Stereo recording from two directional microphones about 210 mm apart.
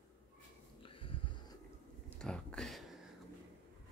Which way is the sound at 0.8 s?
25° left (ahead or behind).